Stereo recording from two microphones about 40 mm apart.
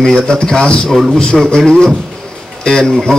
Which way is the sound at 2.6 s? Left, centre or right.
Centre.